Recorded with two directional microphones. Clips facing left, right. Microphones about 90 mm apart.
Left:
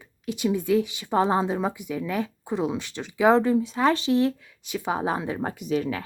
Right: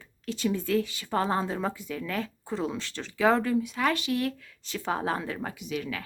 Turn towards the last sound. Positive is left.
turn(degrees=35)  # may be behind; listen again after turning